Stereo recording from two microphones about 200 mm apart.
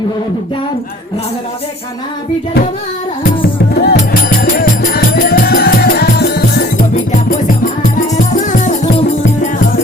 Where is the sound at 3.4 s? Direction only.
50° left (ahead or behind).